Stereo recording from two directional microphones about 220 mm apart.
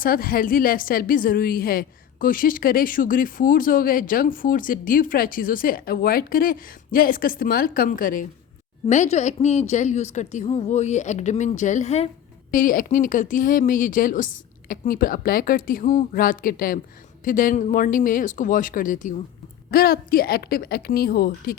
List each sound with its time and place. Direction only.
0.0 s a woman's voice: 40° left (ahead or behind)